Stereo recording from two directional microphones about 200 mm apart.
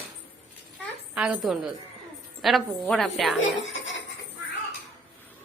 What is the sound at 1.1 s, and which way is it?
A woman's voice, 5° right (ahead or behind).